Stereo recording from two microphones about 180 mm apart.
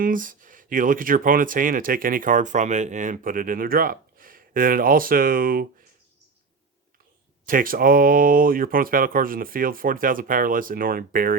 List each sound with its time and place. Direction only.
0.0 s speech: 50° right (ahead or behind)
7.4 s speech: 50° right (ahead or behind)